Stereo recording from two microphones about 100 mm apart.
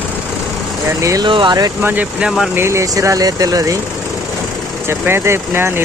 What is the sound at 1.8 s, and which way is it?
Speech, 15° right (ahead or behind).